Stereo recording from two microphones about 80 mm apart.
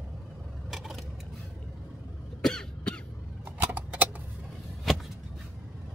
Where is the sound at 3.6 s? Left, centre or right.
Right.